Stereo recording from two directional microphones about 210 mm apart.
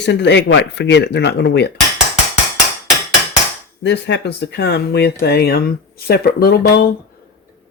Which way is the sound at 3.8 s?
55° left (ahead or behind).